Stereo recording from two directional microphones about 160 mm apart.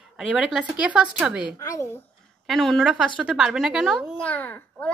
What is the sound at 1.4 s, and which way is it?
Speech, 20° left (ahead or behind).